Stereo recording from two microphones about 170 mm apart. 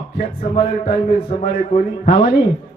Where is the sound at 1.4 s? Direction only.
55° left (ahead or behind).